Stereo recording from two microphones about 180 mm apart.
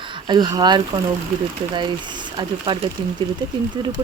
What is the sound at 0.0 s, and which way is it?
Speech, 25° right (ahead or behind).